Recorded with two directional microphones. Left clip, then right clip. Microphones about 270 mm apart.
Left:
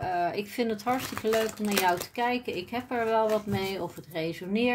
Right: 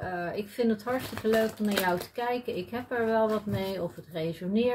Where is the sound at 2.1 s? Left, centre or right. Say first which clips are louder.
Left 2 dB; left.